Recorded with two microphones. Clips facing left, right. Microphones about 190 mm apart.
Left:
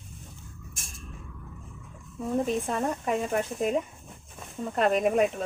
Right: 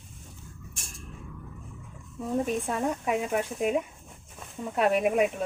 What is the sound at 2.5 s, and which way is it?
Speech, 10° right (ahead or behind).